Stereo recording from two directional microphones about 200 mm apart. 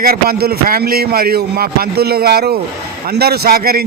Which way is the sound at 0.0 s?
50° right (ahead or behind).